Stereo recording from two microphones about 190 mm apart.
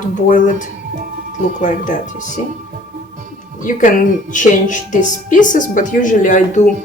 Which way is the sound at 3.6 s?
40° left (ahead or behind).